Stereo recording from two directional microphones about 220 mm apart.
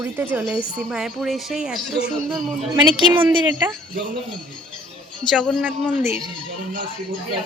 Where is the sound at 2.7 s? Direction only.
20° right (ahead or behind).